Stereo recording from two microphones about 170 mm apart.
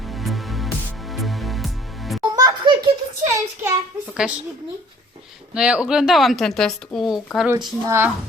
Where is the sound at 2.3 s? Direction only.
20° right (ahead or behind).